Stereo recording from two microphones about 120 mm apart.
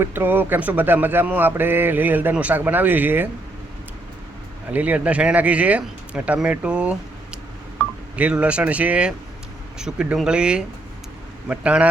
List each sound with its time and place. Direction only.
0.0 s a man's voice: 20° right (ahead or behind)
4.7 s a man's voice: 10° right (ahead or behind)
8.1 s a man's voice: 10° right (ahead or behind)